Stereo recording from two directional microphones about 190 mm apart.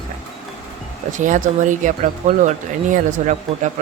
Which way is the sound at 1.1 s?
40° right (ahead or behind).